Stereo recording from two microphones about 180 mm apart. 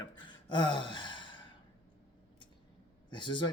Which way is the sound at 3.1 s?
25° left (ahead or behind).